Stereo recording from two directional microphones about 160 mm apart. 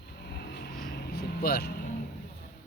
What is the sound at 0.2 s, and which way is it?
Vehicle, 80° left.